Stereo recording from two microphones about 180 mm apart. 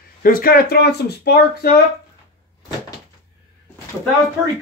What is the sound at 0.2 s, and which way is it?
Speech, 55° left (ahead or behind).